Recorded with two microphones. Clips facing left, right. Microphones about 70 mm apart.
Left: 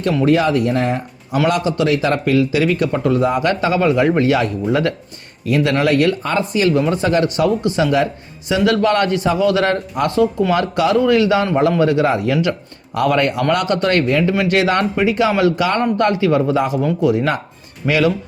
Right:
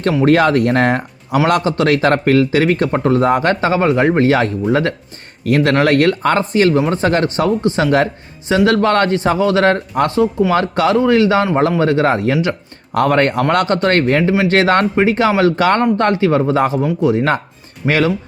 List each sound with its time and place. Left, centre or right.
0.3 s speech: right
1.5 s speech: right
5.5 s speech: right
7.8 s speech: right